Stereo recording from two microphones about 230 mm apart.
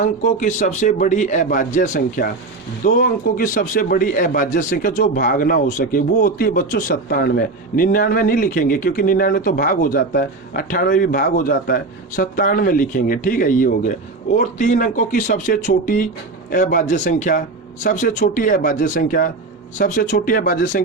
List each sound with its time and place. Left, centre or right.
0.0 s a man's voice: left
3.3 s a man's voice: left